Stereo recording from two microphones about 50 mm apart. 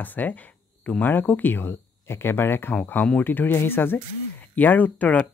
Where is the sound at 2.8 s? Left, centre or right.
Left.